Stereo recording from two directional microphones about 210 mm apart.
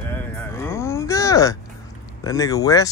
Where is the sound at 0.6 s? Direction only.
15° left (ahead or behind).